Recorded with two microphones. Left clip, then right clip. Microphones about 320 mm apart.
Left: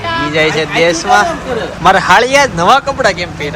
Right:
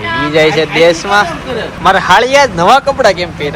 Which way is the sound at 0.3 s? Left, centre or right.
Centre.